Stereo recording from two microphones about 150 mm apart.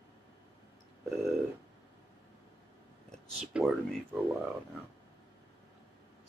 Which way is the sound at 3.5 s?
5° right (ahead or behind).